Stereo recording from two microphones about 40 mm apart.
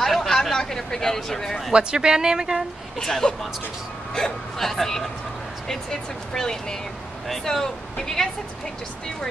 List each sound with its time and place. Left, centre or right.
0.0 s a sound: centre
1.7 s speech: right
3.0 s speech: centre